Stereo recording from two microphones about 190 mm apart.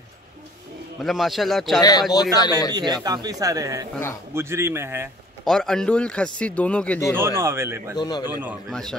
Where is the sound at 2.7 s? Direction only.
20° right (ahead or behind).